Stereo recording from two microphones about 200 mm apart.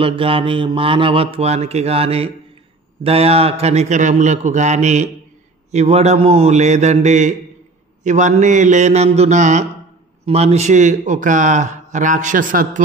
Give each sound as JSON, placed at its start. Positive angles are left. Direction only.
{"t": 0.0, "sound": "speech", "side_deg": -25}